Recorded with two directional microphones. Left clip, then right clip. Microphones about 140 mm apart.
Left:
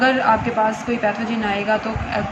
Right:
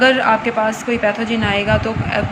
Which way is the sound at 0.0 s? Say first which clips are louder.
Right 3 dB; 30° right (ahead or behind).